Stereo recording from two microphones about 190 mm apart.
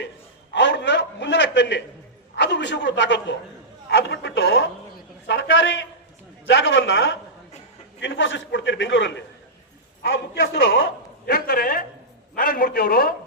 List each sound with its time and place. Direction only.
0.5 s a sound: 70° left (ahead or behind)
2.3 s a man's voice: 65° left (ahead or behind); by 7.2 s 90° left
8.0 s a man's voice: 80° left
11.3 s a man's voice: 50° left (ahead or behind)